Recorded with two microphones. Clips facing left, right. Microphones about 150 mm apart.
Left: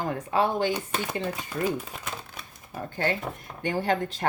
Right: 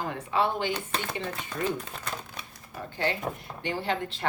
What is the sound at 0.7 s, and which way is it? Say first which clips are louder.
Speech: left 2 dB; 10° left (ahead or behind).